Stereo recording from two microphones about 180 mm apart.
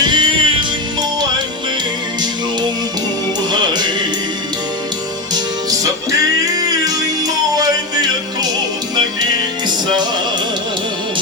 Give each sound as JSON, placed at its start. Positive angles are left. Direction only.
{"t": 0.0, "sound": "music", "side_deg": -25}
{"t": 3.5, "sound": "music", "side_deg": -25}
{"t": 7.5, "sound": "music", "side_deg": -20}
{"t": 9.6, "sound": "music", "side_deg": -25}